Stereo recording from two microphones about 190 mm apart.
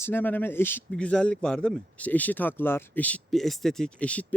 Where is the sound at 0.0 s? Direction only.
10° left (ahead or behind).